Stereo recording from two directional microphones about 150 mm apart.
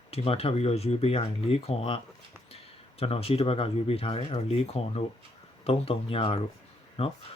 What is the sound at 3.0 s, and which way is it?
Speech, 40° left (ahead or behind).